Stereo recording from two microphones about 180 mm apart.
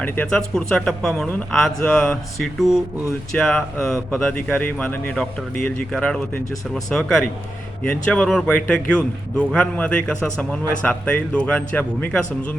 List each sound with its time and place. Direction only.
0.0 s speech: 5° left (ahead or behind)